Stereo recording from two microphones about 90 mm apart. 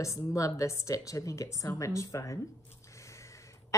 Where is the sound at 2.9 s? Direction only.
35° left (ahead or behind).